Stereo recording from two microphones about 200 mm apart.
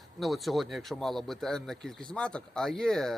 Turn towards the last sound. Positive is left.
turn(degrees=0)  # may be behind; listen again after turning